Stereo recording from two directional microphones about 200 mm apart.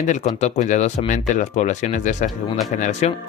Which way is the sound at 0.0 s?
35° left (ahead or behind).